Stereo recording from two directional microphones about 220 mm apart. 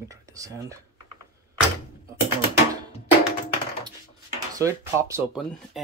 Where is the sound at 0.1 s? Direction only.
15° right (ahead or behind).